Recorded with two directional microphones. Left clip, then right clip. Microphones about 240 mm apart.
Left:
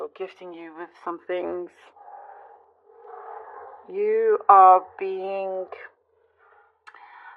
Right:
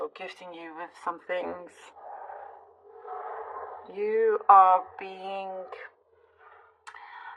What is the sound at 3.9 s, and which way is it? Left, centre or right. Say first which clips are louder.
Speech: left 4 dB; left.